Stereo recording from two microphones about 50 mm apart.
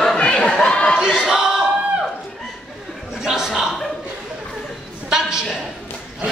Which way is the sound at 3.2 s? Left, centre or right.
Centre.